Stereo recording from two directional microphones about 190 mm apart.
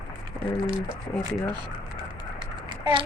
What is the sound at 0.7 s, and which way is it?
Speech, 25° right (ahead or behind).